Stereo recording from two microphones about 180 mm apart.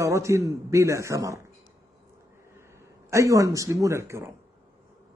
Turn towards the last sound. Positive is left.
turn(degrees=-15)  # may be behind; listen again after turning